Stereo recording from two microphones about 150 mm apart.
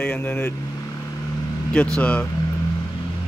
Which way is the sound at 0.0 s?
10° left (ahead or behind).